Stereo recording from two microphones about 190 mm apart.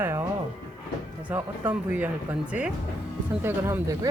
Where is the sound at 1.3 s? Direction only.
10° right (ahead or behind).